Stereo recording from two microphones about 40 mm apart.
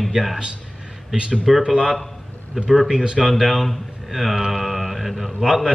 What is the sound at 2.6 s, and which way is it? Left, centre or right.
Speech, centre.